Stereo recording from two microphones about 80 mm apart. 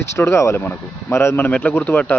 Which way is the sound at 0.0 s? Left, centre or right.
Left.